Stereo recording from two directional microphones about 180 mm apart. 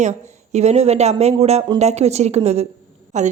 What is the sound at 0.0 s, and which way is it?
A woman's voice, 40° right (ahead or behind).